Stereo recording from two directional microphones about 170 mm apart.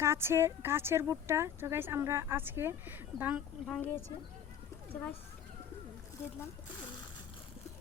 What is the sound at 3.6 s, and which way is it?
Speech, 5° left (ahead or behind).